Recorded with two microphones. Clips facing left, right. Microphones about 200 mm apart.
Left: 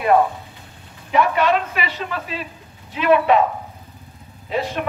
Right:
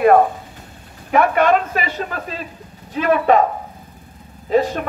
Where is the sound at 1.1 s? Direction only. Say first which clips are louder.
Right 3 dB; 50° right (ahead or behind).